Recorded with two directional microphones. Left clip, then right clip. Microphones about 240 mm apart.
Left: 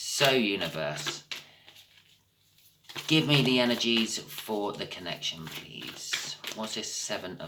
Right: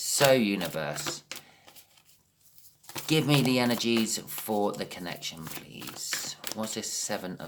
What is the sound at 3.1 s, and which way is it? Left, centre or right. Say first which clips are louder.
Speech: left 1 dB; right.